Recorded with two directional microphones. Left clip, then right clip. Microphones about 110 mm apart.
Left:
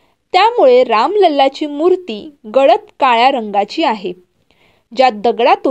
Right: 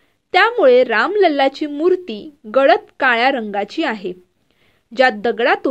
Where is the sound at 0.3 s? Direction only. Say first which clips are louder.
Left 3 dB; 20° left (ahead or behind).